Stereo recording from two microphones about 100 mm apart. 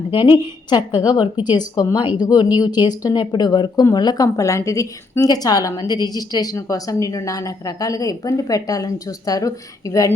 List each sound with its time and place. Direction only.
0.1 s a woman's voice: 55° left (ahead or behind); by 10.1 s 35° left (ahead or behind)